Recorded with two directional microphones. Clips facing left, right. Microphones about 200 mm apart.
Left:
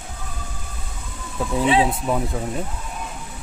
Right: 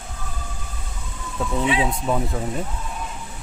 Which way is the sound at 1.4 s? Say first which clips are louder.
Left 3 dB; 5° left (ahead or behind).